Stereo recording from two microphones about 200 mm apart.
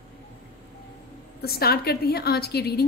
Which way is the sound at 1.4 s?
50° left (ahead or behind).